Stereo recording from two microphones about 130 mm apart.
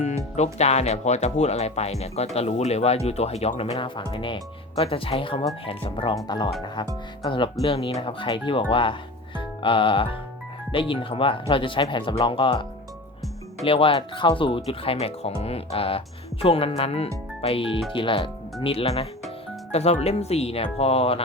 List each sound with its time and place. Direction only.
0.3 s speech: 60° left (ahead or behind)
3.8 s speech: 40° left (ahead or behind)
13.7 s speech: 45° left (ahead or behind)